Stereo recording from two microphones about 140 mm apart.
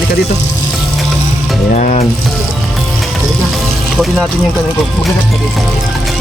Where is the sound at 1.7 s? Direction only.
55° left (ahead or behind).